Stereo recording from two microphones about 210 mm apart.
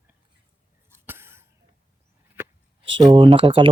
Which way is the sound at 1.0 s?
10° right (ahead or behind).